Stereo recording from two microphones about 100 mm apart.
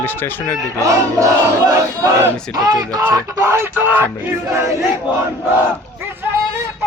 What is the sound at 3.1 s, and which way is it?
Speech, 30° right (ahead or behind).